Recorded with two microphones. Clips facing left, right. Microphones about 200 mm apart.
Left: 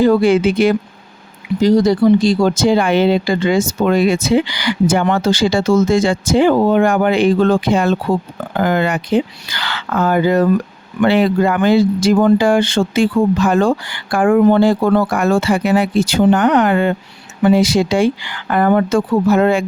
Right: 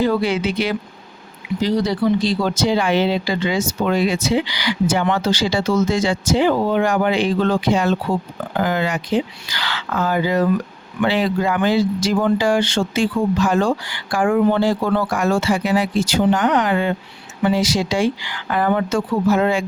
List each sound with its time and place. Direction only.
0.0 s speech: 45° left (ahead or behind)